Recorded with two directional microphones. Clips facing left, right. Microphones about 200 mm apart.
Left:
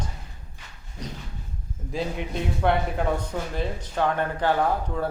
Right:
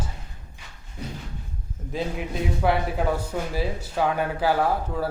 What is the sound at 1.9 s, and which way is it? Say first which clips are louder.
A man's voice: even; centre (ahead or behind).